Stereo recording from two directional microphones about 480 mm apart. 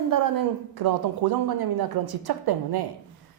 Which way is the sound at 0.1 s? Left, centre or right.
Right.